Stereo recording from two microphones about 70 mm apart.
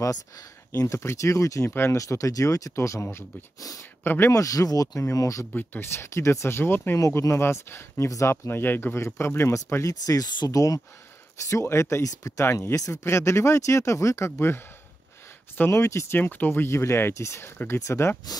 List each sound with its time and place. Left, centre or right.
0.7 s speech: left
1.7 s speech: left
2.0 s speech: left
4.0 s speech: left
4.3 s speech: left
5.5 s speech: left
7.0 s speech: left
11.6 s speech: left
15.8 s speech: left
16.2 s speech: left